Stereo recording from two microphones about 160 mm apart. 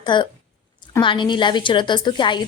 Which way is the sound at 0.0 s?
30° left (ahead or behind).